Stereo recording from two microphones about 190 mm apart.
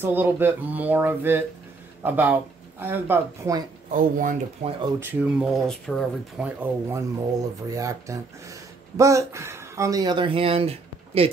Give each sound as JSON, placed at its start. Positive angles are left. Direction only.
{"t": 0.0, "sound": "speech", "side_deg": -10}
{"t": 3.9, "sound": "speech", "side_deg": -45}
{"t": 4.6, "sound": "speech", "side_deg": -35}
{"t": 5.0, "sound": "speech", "side_deg": -5}